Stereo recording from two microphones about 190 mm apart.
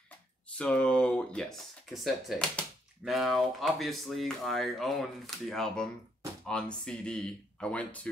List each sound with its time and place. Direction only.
0.6 s speech: 5° left (ahead or behind)